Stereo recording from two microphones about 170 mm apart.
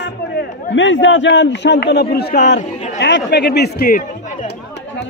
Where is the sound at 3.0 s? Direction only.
90° left; by 4.5 s 55° left (ahead or behind).